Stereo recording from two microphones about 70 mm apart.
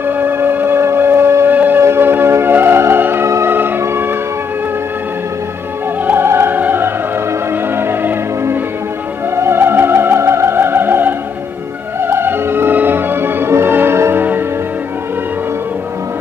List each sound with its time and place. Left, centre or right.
0.2 s music: right
6.0 s music: right